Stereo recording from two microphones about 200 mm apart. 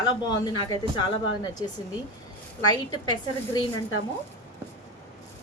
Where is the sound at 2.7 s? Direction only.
20° left (ahead or behind).